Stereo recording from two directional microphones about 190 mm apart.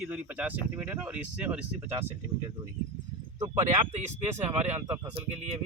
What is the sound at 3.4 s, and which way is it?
Speech, 20° right (ahead or behind).